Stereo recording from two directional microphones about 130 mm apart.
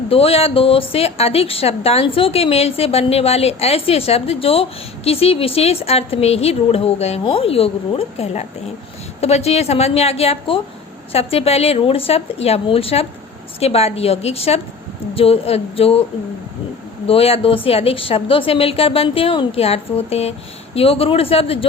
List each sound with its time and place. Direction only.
0.1 s a woman's voice: 50° left (ahead or behind)
17.1 s a woman's voice: 50° left (ahead or behind)